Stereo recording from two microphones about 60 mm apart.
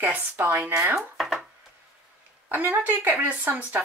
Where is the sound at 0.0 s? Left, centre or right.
Right.